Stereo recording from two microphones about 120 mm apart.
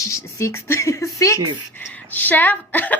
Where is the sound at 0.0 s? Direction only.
25° left (ahead or behind).